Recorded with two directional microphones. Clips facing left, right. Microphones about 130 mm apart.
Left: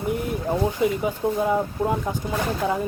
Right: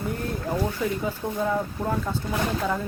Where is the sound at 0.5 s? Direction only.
20° left (ahead or behind).